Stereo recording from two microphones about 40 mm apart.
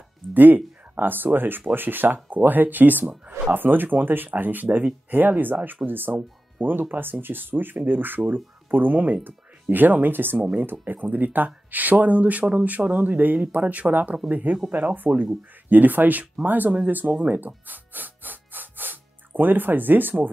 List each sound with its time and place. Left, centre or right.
0.3 s speech: right
4.6 s speech: right
5.3 s speech: right
15.1 s speech: centre
15.7 s speech: right
17.2 s music: right